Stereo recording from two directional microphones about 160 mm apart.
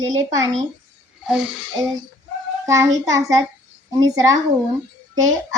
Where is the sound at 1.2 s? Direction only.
5° right (ahead or behind).